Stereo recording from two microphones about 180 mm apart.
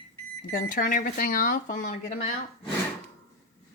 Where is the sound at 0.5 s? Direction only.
50° left (ahead or behind).